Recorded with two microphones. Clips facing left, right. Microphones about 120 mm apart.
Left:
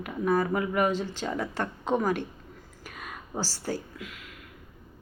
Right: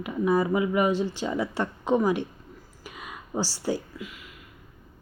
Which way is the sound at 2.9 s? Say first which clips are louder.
Right 3 dB; 5° right (ahead or behind).